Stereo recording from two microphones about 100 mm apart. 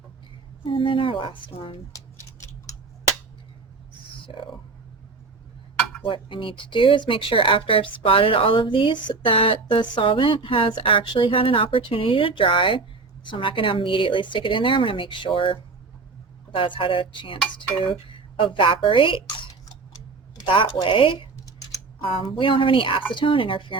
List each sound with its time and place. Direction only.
0.7 s speech: 60° left (ahead or behind)
1.9 s a sound: 35° left (ahead or behind)
6.1 s speech: 55° left (ahead or behind)
16.6 s speech: 60° left (ahead or behind)
20.3 s a sound: 55° left (ahead or behind)
20.8 s speech: 60° left (ahead or behind)